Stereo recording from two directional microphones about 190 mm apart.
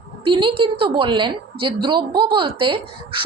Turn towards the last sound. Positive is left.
turn(degrees=-25)  # may be behind; listen again after turning